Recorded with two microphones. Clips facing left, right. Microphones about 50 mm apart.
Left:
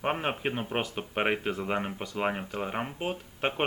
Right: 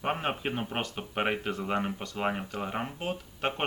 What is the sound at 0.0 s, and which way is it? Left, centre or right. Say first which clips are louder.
Speech: left 1 dB; centre.